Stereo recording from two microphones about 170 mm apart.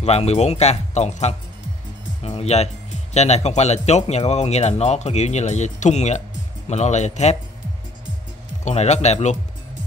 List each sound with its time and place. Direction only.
0.0 s speech: 40° left (ahead or behind)
8.6 s speech: 40° left (ahead or behind)